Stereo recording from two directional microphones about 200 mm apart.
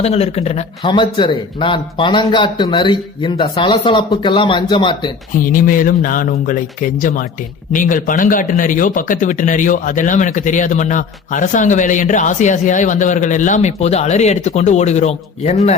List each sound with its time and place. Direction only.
0.0 s a man's voice: 30° left (ahead or behind)
5.5 s speech: 45° left (ahead or behind)
7.7 s speech: 40° left (ahead or behind)